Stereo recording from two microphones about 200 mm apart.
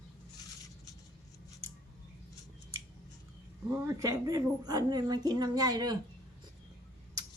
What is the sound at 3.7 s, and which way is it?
A woman's voice, 15° right (ahead or behind).